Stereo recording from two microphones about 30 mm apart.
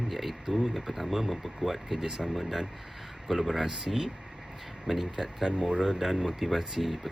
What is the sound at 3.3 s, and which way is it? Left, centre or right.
Speech, centre.